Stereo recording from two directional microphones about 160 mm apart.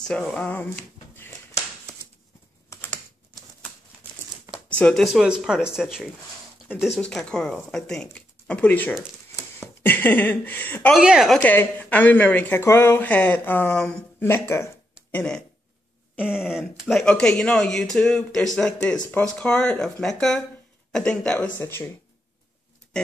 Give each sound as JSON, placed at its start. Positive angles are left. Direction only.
{"t": 0.0, "sound": "speech", "side_deg": 5}
{"t": 2.7, "sound": "typing", "side_deg": 15}
{"t": 4.6, "sound": "speech", "side_deg": 10}
{"t": 11.0, "sound": "speech", "side_deg": -5}
{"t": 11.4, "sound": "speech", "side_deg": 10}
{"t": 16.2, "sound": "speech", "side_deg": -5}